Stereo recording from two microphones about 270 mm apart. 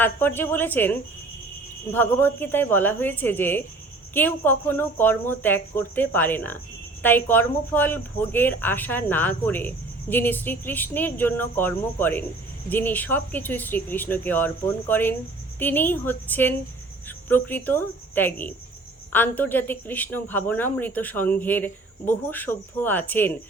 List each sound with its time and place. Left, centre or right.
0.0 s speech: centre